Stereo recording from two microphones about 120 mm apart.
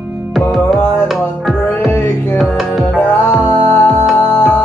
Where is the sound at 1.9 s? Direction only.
20° left (ahead or behind).